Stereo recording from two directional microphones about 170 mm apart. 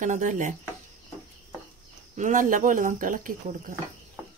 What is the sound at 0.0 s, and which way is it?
Speech, 50° right (ahead or behind).